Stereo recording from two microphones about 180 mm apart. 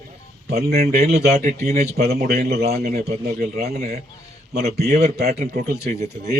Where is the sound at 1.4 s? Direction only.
45° right (ahead or behind); by 2.4 s 60° right (ahead or behind).